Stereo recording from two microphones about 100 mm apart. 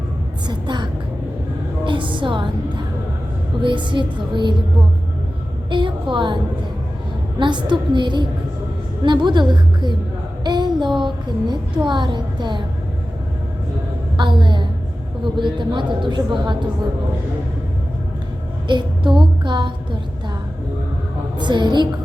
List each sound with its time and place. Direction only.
0.4 s vehicle: 50° right (ahead or behind)
1.8 s music: 55° right (ahead or behind)
3.6 s speech: 50° right (ahead or behind)
5.7 s a sound: 55° right (ahead or behind)
7.3 s speech: 50° right (ahead or behind)
10.4 s a sound: 45° right (ahead or behind)
11.0 s speech: 50° right (ahead or behind)
14.2 s a woman's voice: 50° right (ahead or behind)
18.7 s a sound: 50° right (ahead or behind)
21.3 s a woman's voice: 50° right (ahead or behind)